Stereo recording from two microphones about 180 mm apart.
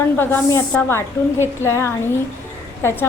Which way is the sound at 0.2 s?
10° left (ahead or behind).